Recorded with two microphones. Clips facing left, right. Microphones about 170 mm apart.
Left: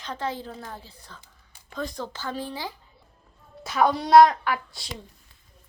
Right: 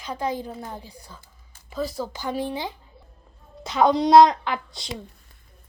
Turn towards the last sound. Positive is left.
turn(degrees=-20)  # may be behind; listen again after turning